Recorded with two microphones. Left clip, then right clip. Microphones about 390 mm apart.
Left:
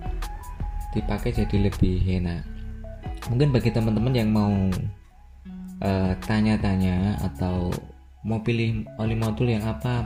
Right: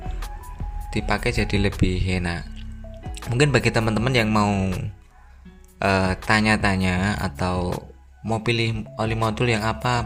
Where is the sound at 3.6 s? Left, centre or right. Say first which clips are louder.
Right 4 dB; centre.